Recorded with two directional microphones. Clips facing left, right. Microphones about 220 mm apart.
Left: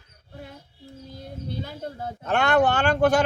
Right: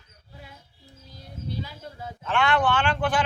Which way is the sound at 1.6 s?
55° left (ahead or behind).